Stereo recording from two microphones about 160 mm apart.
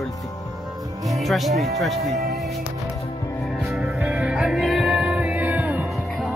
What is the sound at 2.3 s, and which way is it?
Music, centre (ahead or behind).